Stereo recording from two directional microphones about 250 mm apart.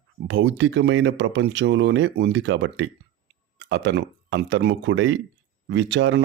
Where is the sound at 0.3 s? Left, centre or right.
Right.